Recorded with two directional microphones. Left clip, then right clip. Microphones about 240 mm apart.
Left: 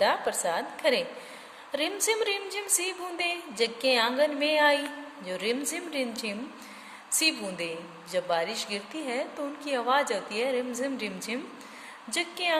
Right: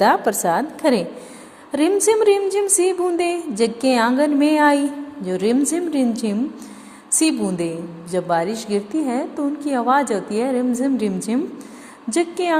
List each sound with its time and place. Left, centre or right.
0.0 s a woman's voice: centre
2.0 s a woman's voice: centre